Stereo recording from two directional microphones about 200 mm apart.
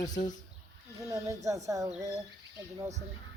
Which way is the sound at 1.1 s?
15° right (ahead or behind).